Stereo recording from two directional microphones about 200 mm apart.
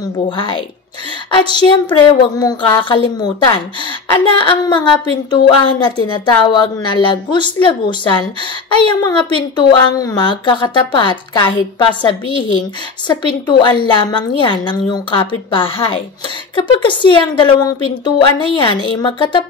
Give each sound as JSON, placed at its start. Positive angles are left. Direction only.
{"t": 1.3, "sound": "a woman's voice", "side_deg": 25}
{"t": 13.5, "sound": "a woman's voice", "side_deg": 25}